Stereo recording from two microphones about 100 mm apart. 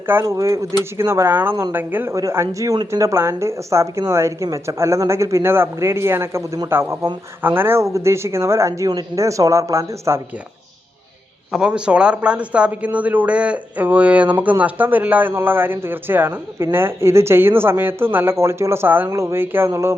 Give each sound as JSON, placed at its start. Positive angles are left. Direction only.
{"t": 0.1, "sound": "speech", "side_deg": -30}
{"t": 11.5, "sound": "speech", "side_deg": -10}